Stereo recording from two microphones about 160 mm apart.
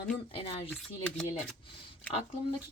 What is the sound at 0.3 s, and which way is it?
Speech, 35° left (ahead or behind).